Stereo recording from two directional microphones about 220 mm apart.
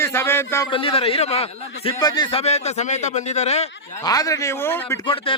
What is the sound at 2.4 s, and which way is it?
A man's voice, 30° left (ahead or behind).